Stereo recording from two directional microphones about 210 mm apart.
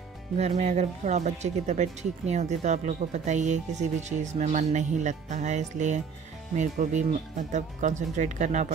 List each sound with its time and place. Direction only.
0.4 s speech: 30° right (ahead or behind)